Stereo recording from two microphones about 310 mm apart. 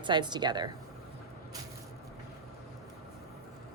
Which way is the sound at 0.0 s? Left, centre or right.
Centre.